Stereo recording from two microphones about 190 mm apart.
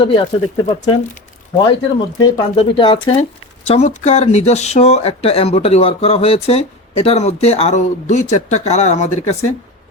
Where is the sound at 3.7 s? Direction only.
35° left (ahead or behind).